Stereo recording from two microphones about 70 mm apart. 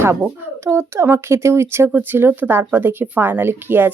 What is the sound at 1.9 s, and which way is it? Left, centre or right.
Speech, right.